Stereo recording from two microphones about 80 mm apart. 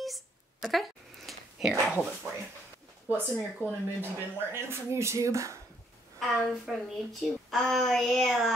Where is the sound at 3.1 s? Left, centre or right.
Right.